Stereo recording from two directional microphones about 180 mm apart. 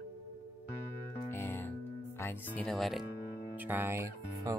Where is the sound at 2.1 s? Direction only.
15° left (ahead or behind).